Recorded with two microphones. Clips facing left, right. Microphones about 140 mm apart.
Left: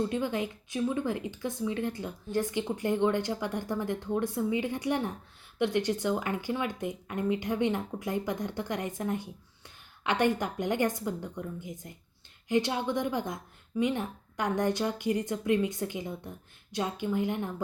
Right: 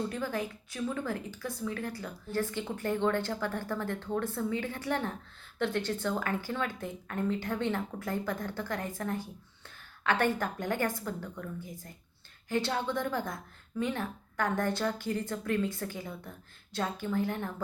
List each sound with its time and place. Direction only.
0.1 s speech: 20° left (ahead or behind)